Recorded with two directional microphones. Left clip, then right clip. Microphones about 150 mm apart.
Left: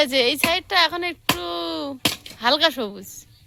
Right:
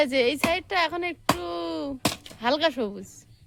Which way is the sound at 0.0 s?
10° right (ahead or behind).